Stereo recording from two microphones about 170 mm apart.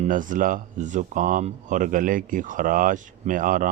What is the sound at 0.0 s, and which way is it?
Speech, 50° right (ahead or behind).